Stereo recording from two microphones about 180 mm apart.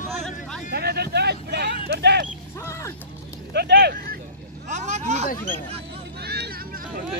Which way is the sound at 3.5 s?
65° right (ahead or behind).